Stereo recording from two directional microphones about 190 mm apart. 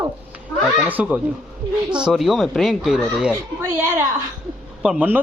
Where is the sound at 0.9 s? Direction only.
10° right (ahead or behind).